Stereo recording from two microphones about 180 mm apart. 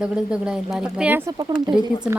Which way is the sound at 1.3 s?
20° right (ahead or behind).